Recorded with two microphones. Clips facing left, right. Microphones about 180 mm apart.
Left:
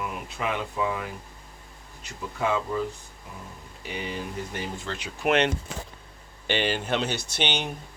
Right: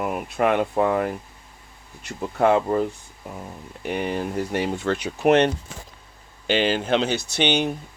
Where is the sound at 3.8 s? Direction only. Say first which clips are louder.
Right 8 dB; 55° right (ahead or behind).